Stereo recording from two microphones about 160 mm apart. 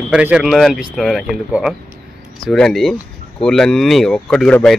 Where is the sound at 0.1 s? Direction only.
5° right (ahead or behind).